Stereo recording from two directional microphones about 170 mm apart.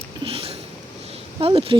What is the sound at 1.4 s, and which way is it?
Speech, 35° right (ahead or behind).